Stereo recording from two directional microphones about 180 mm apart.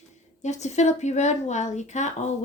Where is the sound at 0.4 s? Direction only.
40° left (ahead or behind).